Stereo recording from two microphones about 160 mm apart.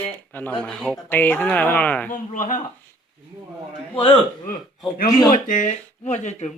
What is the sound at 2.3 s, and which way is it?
Speech, 55° left (ahead or behind).